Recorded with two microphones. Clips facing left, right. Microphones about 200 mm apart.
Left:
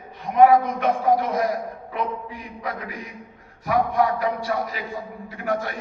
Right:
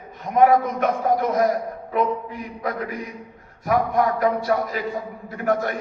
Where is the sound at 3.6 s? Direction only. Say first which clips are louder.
Right 1 dB; 45° right (ahead or behind).